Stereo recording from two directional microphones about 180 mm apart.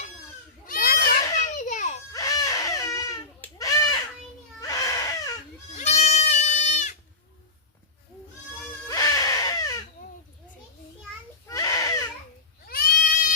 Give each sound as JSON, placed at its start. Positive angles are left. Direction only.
{"t": 0.7, "sound": "children playing", "side_deg": 50}
{"t": 2.1, "sound": "baby cry", "side_deg": 20}
{"t": 5.7, "sound": "goat", "side_deg": 40}
{"t": 8.9, "sound": "baby cry", "side_deg": 20}
{"t": 11.4, "sound": "baby cry", "side_deg": 20}
{"t": 12.6, "sound": "goat", "side_deg": 55}